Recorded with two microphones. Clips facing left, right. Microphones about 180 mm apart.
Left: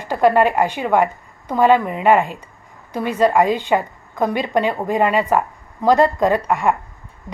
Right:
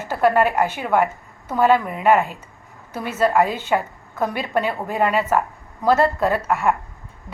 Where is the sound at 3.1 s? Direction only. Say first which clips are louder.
Left 3 dB; 15° left (ahead or behind).